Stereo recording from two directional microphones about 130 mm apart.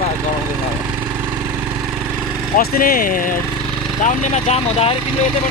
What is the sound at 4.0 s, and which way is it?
Speech, 55° left (ahead or behind).